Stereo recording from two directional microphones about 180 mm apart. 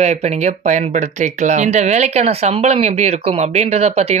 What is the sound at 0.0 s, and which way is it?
Speech, 35° right (ahead or behind).